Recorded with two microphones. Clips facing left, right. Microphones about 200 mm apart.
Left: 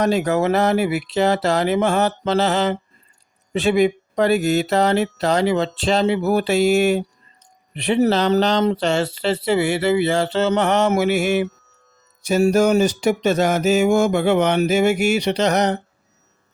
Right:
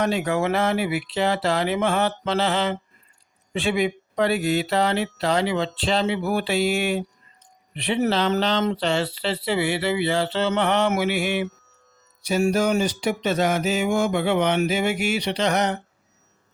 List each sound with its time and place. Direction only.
0.0 s speech: 40° left (ahead or behind)